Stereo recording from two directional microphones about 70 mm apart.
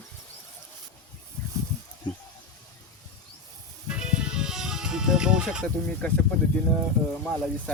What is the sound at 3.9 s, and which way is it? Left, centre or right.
Music, centre.